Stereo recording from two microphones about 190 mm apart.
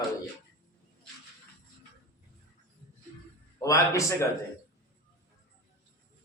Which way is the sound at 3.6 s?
15° left (ahead or behind).